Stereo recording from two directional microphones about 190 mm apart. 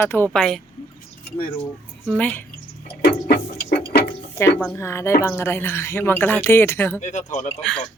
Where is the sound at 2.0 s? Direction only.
5° left (ahead or behind).